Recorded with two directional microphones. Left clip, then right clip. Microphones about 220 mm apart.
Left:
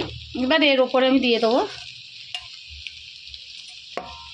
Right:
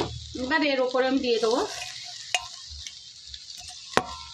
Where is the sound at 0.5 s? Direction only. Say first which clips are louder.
Left 6 dB; 25° left (ahead or behind).